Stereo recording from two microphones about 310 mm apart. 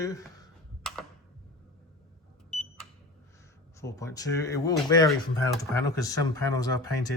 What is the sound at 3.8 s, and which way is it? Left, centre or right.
Speech, centre.